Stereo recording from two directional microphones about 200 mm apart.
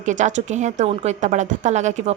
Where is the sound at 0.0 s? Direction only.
35° right (ahead or behind).